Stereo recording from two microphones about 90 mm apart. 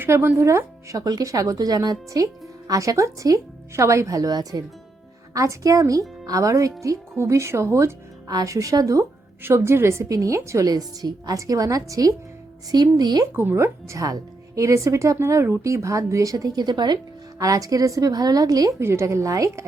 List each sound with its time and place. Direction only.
0.0 s speech: 30° right (ahead or behind)
9.4 s speech: 25° right (ahead or behind); by 13.2 s 50° right (ahead or behind)
13.3 s speech: 25° right (ahead or behind); by 17.0 s 55° right (ahead or behind)
17.4 s speech: 40° right (ahead or behind)
18.8 s speech: 30° right (ahead or behind)